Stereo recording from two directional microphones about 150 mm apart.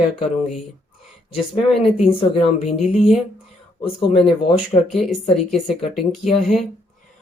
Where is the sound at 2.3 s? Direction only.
45° left (ahead or behind).